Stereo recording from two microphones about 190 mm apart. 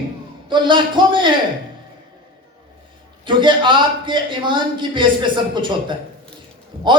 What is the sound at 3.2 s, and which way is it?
A woman's voice, 25° right (ahead or behind).